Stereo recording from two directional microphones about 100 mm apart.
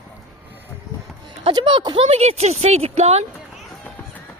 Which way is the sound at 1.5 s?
45° right (ahead or behind).